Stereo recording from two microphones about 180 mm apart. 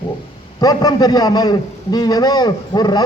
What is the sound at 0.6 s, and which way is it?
A man's voice, 20° left (ahead or behind).